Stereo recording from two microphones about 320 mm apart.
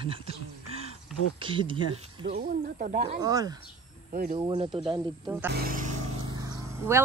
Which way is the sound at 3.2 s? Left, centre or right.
Centre.